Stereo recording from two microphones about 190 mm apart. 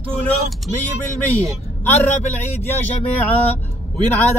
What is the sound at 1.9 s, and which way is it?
Speech, 35° left (ahead or behind).